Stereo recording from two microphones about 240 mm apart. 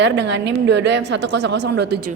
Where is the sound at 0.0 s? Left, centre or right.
Right.